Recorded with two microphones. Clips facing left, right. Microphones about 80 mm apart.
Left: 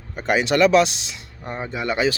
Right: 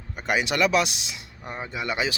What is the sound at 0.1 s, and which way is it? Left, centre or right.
Speech, centre.